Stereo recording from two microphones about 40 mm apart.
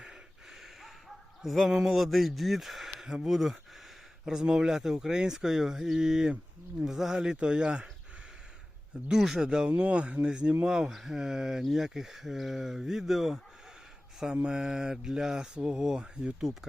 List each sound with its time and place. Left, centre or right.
1.4 s speech: centre
4.3 s speech: centre
7.3 s speech: right
9.0 s speech: centre
10.7 s speech: centre
14.4 s speech: centre